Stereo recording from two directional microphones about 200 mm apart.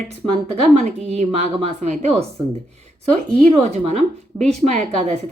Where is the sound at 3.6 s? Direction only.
35° right (ahead or behind).